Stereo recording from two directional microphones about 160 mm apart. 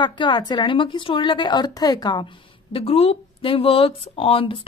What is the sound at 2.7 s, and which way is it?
Speech, 35° left (ahead or behind).